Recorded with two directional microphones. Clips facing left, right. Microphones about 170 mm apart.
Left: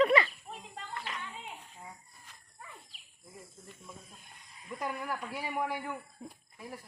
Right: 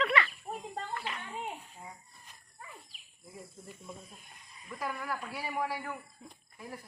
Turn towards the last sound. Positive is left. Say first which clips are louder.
# left 1 dB
turn(degrees=20)  # may be behind; listen again after turning